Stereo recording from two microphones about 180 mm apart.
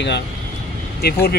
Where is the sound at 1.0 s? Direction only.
60° left (ahead or behind).